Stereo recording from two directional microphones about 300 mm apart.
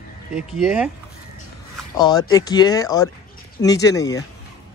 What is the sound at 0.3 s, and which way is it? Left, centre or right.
Speech, centre.